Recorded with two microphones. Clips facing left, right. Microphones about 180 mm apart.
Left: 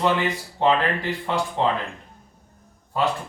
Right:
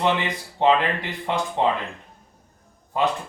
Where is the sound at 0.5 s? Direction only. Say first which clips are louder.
Right 2 dB; 20° right (ahead or behind).